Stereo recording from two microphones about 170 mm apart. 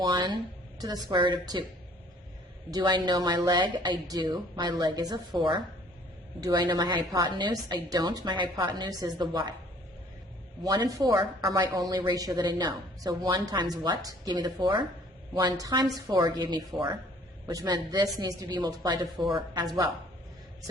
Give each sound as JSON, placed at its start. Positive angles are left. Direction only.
{"t": 0.0, "sound": "a woman's voice", "side_deg": -25}
{"t": 2.6, "sound": "a woman's voice", "side_deg": -25}
{"t": 10.6, "sound": "a woman's voice", "side_deg": -25}